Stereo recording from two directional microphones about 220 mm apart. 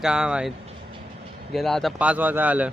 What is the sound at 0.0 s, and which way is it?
Speech, 5° right (ahead or behind).